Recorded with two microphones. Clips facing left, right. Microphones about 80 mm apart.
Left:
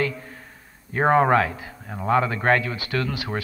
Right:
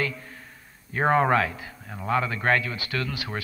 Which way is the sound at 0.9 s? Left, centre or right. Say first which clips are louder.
Left 3 dB; centre.